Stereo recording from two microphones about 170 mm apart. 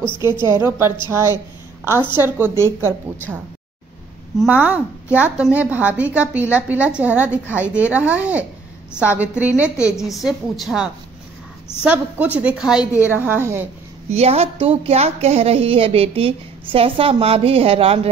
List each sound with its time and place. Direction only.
0.2 s a woman's voice: 15° right (ahead or behind)
4.4 s a woman's voice: 10° right (ahead or behind)
14.1 s a woman's voice: 35° right (ahead or behind)